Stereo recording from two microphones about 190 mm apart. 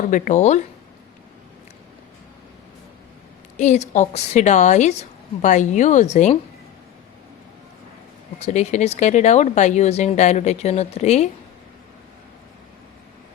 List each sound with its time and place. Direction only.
0.1 s speech: 40° left (ahead or behind)
3.6 s speech: 40° left (ahead or behind)
8.4 s speech: 35° left (ahead or behind)